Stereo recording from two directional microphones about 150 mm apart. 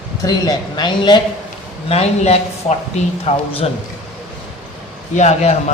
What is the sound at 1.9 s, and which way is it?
A man's voice, 45° left (ahead or behind).